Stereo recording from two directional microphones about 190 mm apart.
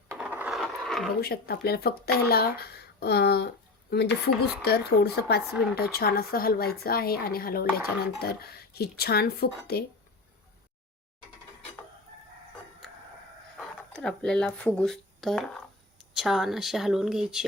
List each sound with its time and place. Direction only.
0.1 s coin: 10° right (ahead or behind)
1.2 s speech: 55° left (ahead or behind)
13.6 s speech: 5° left (ahead or behind)